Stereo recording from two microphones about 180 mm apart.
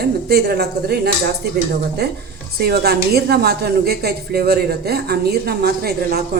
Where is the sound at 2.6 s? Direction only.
60° right (ahead or behind).